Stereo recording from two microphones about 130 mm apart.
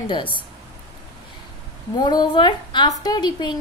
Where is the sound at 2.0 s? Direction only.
35° left (ahead or behind).